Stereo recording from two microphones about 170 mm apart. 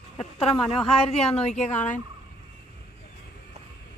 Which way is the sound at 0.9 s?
35° left (ahead or behind).